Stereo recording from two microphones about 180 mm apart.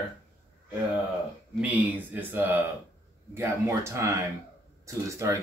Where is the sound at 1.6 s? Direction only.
10° right (ahead or behind).